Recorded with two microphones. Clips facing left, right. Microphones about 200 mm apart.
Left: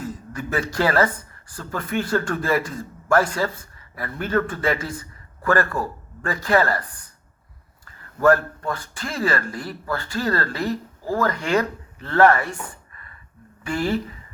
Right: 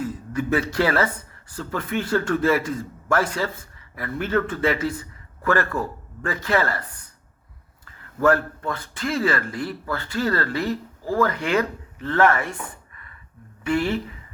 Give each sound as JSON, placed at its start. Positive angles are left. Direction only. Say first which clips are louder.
{"t": 0.0, "sound": "a man's voice", "louder": "right 4 dB", "side_deg": 40}
{"t": 6.2, "sound": "speech", "louder": "left 3 dB", "side_deg": 40}
{"t": 8.2, "sound": "speech", "louder": "left 2 dB", "side_deg": 40}
{"t": 12.9, "sound": "a sound", "louder": "left 1 dB", "side_deg": 40}
{"t": 13.7, "sound": "speech", "louder": "right 1 dB", "side_deg": 40}